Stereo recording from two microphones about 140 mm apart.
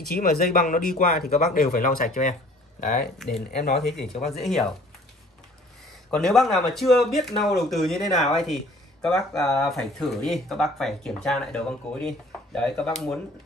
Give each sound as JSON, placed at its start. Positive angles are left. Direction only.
{"t": 0.1, "sound": "speech", "side_deg": 90}
{"t": 4.2, "sound": "speech", "side_deg": 0}
{"t": 6.0, "sound": "speech", "side_deg": 5}